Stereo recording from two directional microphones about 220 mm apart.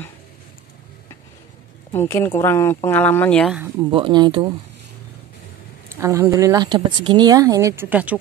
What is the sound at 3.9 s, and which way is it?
Speech, 20° right (ahead or behind).